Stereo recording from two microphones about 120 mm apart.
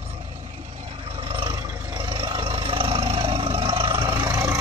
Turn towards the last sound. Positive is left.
turn(degrees=-30)  # may be behind; listen again after turning